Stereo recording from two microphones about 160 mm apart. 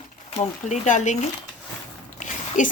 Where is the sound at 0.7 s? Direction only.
50° left (ahead or behind).